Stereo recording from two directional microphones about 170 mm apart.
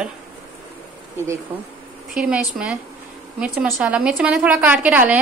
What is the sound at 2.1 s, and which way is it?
A woman's voice, 5° right (ahead or behind).